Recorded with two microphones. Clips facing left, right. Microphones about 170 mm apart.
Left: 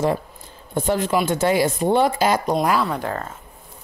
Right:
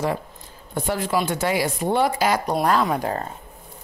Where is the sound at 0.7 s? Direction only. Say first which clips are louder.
Left 3 dB; 25° left (ahead or behind).